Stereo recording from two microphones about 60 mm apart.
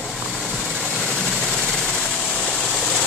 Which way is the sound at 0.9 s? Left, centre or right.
Centre.